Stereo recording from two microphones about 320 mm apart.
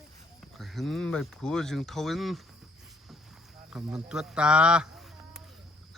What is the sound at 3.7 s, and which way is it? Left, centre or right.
Speech, centre.